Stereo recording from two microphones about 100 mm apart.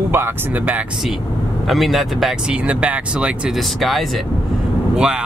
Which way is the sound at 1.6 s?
Centre (ahead or behind).